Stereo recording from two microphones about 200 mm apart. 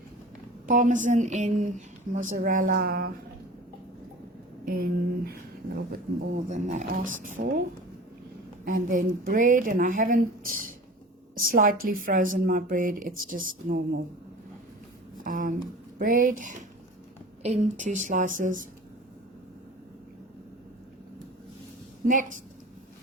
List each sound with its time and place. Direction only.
0.7 s a woman's voice: 40° right (ahead or behind)
4.6 s speech: 45° right (ahead or behind)
6.5 s a woman's voice: 35° right (ahead or behind)
8.6 s a woman's voice: 40° right (ahead or behind)
15.2 s a woman's voice: 40° right (ahead or behind)
22.0 s a woman's voice: 40° right (ahead or behind)